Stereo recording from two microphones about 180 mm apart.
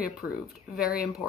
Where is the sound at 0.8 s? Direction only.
55° left (ahead or behind).